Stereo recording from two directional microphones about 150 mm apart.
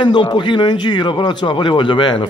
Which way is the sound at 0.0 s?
30° left (ahead or behind).